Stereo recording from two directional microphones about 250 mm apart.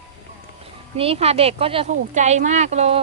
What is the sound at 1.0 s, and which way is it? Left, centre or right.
Speech, right.